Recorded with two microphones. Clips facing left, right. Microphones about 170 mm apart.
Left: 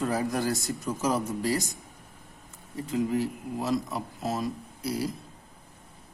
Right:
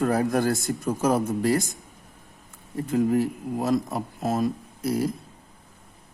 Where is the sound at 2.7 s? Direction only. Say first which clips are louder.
Right 5 dB; 50° right (ahead or behind).